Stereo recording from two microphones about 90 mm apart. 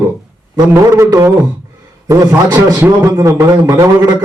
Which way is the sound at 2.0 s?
45° right (ahead or behind).